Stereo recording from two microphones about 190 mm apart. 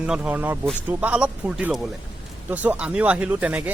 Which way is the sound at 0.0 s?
5° right (ahead or behind).